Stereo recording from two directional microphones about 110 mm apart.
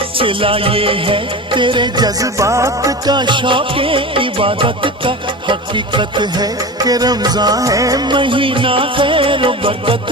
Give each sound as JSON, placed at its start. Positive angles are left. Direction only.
{"t": 0.2, "sound": "music", "side_deg": -55}